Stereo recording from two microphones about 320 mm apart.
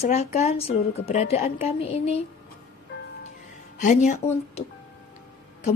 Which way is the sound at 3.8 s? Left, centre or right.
Left.